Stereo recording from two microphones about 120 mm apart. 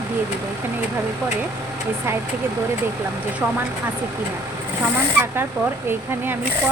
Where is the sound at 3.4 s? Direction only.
15° right (ahead or behind).